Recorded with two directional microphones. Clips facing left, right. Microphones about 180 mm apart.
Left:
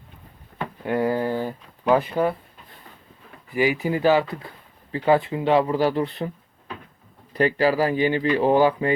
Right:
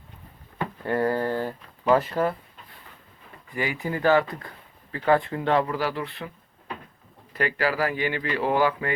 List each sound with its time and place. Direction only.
0.8 s speech: 5° left (ahead or behind)
3.5 s speech: 15° left (ahead or behind)
5.9 s speech: 40° left (ahead or behind)
7.3 s speech: 35° left (ahead or behind)
7.8 s speech: 20° left (ahead or behind)